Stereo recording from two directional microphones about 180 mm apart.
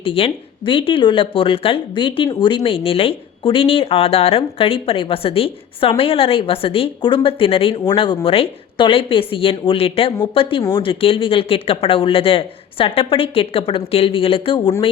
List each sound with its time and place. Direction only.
0.0 s a woman's voice: 30° left (ahead or behind)